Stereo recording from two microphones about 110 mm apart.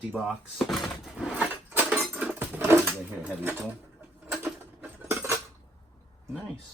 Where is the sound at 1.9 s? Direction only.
10° right (ahead or behind).